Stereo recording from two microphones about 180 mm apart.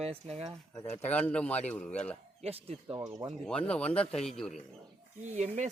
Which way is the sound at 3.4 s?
5° left (ahead or behind).